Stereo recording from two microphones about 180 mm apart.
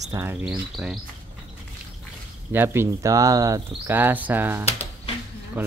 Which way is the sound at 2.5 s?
15° right (ahead or behind).